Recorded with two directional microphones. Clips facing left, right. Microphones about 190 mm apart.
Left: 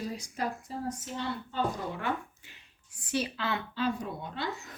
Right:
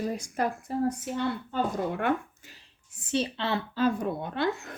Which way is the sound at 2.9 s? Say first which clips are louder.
Right 3 dB; 25° right (ahead or behind).